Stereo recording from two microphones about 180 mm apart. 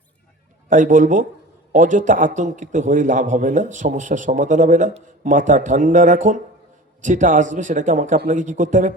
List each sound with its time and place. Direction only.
0.7 s a man's voice: 45° right (ahead or behind)